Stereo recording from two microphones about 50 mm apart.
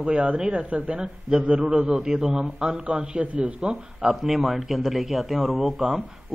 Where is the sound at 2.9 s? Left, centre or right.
Right.